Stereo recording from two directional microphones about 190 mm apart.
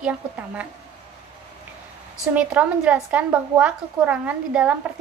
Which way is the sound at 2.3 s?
5° right (ahead or behind).